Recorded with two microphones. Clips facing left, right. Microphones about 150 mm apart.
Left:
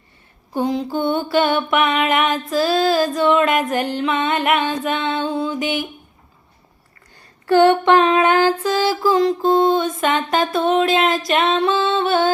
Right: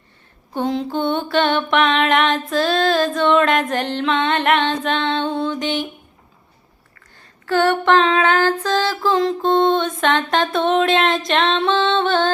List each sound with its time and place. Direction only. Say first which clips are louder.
0.5 s mantra: left 1 dB; centre (ahead or behind)
7.4 s female singing: left 4 dB; 15° left (ahead or behind)
11.3 s music: left 1 dB; 5° left (ahead or behind)